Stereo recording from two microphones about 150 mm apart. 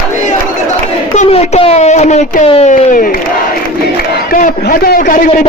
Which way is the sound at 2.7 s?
60° left (ahead or behind).